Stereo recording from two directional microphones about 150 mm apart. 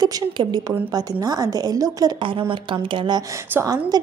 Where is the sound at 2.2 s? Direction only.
35° right (ahead or behind).